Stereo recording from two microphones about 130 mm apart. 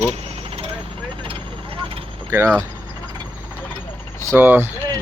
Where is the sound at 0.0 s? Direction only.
50° right (ahead or behind).